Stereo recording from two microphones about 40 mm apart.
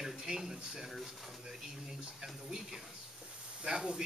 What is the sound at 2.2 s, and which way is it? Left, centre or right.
Speech, centre.